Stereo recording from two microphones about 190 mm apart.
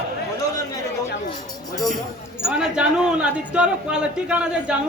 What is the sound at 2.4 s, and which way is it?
A man's voice, 5° right (ahead or behind).